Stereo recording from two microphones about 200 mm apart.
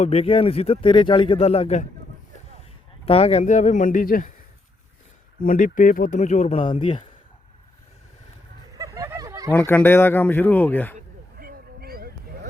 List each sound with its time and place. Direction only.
0.0 s speech: 30° left (ahead or behind)
3.1 s speech: 30° left (ahead or behind)
5.4 s speech: 45° left (ahead or behind); by 7.1 s 25° left (ahead or behind)
8.7 s a sound: 15° right (ahead or behind)
9.5 s speech: 10° left (ahead or behind)
10.9 s a sound: 45° right (ahead or behind)